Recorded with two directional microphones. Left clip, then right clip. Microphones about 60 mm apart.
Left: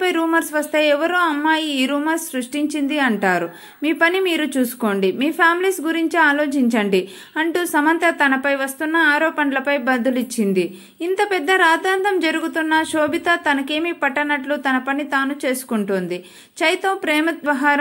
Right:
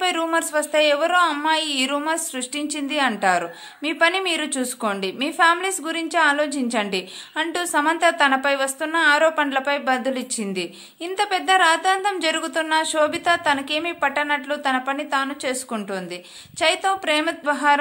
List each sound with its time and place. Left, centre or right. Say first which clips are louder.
0.0 s a woman's voice: left 3 dB; left
8.0 s speech: left 1 dB; centre
9.6 s speech: left 2 dB; left
10.4 s a woman's voice: left 8 dB; left
11.2 s a woman's voice: left 1 dB; left